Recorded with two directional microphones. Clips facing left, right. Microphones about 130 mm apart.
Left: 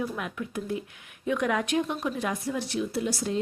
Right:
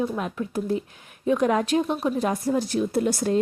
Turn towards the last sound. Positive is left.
turn(degrees=-50)  # may be behind; listen again after turning